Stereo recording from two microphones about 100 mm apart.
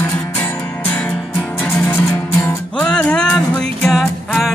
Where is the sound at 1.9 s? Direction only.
25° left (ahead or behind).